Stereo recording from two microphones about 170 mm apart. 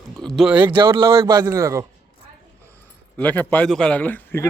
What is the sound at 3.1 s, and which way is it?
A man's voice, 10° left (ahead or behind).